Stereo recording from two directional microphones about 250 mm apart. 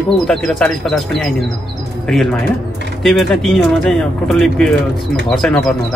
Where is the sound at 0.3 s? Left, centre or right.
Centre.